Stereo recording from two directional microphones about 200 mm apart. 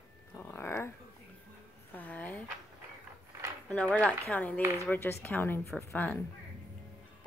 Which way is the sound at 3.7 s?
5° left (ahead or behind).